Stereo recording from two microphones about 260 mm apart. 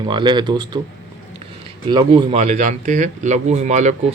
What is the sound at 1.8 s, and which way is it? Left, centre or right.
Speech, centre.